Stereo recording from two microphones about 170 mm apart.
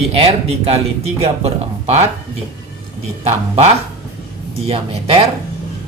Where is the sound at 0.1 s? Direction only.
35° right (ahead or behind).